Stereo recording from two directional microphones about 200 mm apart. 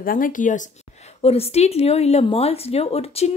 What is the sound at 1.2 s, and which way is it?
Speech, 30° left (ahead or behind).